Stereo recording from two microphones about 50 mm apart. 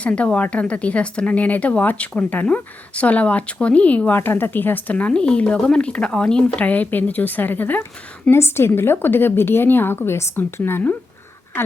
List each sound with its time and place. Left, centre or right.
0.0 s speech: left
4.1 s a woman's voice: left
5.1 s speech: centre
6.6 s speech: left
8.3 s a woman's voice: left